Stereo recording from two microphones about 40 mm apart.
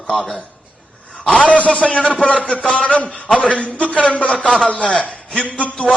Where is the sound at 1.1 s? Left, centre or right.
Left.